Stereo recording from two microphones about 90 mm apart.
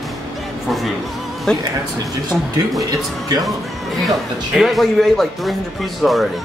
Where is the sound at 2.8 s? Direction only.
45° right (ahead or behind).